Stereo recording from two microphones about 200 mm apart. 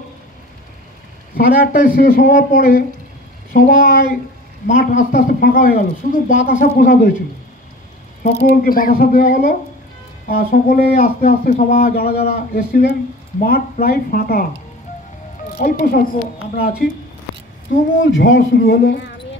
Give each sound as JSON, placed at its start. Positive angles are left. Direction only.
{"t": 1.3, "sound": "speech", "side_deg": 50}
{"t": 8.2, "sound": "speech", "side_deg": 45}
{"t": 15.6, "sound": "speech", "side_deg": 45}
{"t": 18.0, "sound": "a man's voice", "side_deg": 65}